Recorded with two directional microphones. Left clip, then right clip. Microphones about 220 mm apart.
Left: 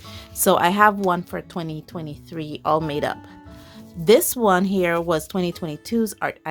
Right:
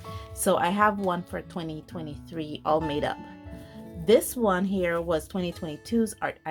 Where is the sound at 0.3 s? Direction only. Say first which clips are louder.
Left 7 dB; 30° left (ahead or behind).